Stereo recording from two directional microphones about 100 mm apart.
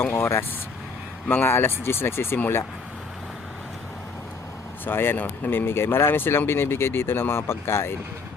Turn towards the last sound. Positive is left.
turn(degrees=25)  # may be behind; listen again after turning